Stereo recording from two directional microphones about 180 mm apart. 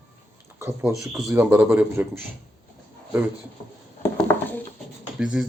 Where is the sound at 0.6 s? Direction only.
15° right (ahead or behind).